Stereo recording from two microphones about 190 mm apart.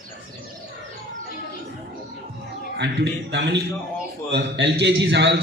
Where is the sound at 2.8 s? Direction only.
65° right (ahead or behind).